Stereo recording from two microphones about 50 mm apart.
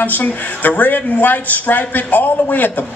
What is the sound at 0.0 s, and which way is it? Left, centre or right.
A man's voice, left.